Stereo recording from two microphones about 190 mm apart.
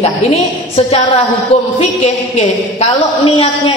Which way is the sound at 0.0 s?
35° left (ahead or behind).